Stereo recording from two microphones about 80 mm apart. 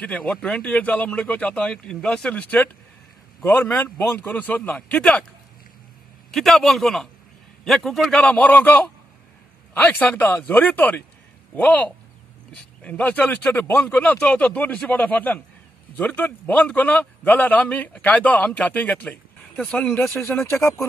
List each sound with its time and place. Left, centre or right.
0.0 s a man's voice: centre
6.3 s a man's voice: centre
8.1 s a man's voice: centre
20.1 s speech: left